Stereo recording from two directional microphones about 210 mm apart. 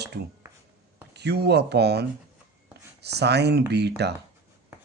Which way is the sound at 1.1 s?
55° right (ahead or behind).